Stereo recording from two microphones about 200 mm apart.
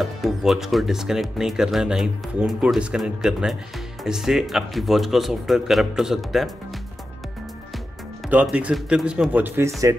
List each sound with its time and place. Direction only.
0.0 s speech: centre (ahead or behind)
8.3 s speech: 5° right (ahead or behind)